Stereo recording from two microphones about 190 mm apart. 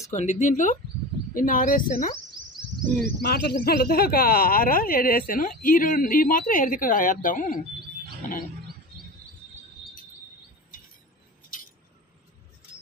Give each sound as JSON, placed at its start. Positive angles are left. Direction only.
{"t": 0.1, "sound": "speech", "side_deg": 40}
{"t": 3.2, "sound": "speech", "side_deg": 55}